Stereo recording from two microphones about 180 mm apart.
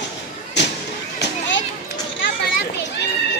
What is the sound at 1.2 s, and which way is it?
Children playing, 90° left.